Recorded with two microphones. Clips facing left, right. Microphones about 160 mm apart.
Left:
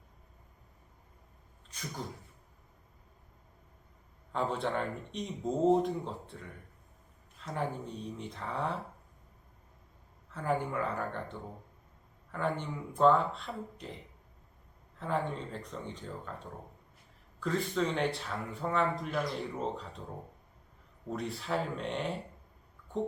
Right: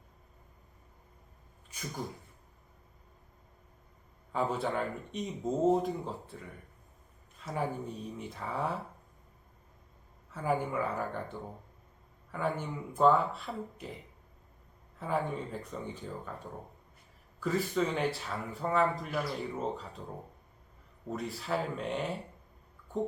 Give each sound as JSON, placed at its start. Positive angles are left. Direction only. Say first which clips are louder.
{"t": 4.3, "sound": "speech", "louder": "right 1 dB", "side_deg": -5}
{"t": 10.3, "sound": "speech", "louder": "right 1 dB", "side_deg": -5}
{"t": 12.3, "sound": "speech", "louder": "even", "side_deg": -5}
{"t": 14.9, "sound": "speech", "louder": "right 1 dB", "side_deg": -5}
{"t": 17.4, "sound": "speech", "louder": "right 1 dB", "side_deg": -5}
{"t": 21.1, "sound": "speech", "louder": "even", "side_deg": 0}